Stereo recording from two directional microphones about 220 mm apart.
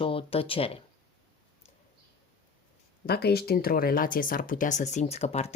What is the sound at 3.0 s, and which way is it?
Speech, 45° left (ahead or behind).